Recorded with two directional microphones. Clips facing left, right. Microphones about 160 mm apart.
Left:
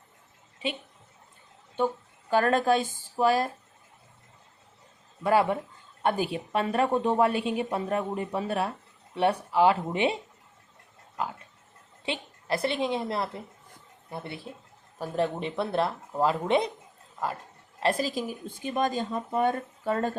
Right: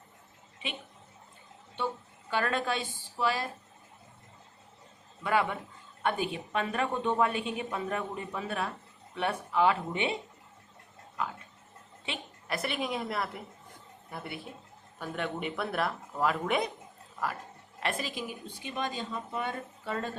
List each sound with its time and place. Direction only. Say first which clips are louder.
2.3 s a woman's voice: left 8 dB; 40° left (ahead or behind)
5.2 s a woman's voice: left 6 dB; 35° left (ahead or behind)
12.0 s a woman's voice: left 6 dB; 30° left (ahead or behind)
17.7 s a woman's voice: left 7 dB; 35° left (ahead or behind)